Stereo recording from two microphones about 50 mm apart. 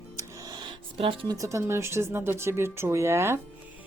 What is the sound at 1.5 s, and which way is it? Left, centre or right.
Speech, right.